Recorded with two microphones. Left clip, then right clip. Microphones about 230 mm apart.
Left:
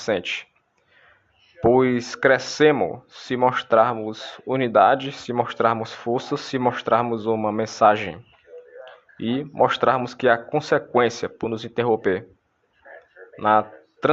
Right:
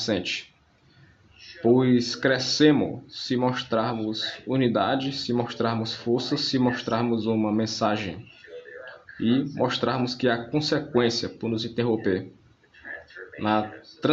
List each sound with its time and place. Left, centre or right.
0.0 s speech: left
1.7 s speech: left
13.4 s speech: left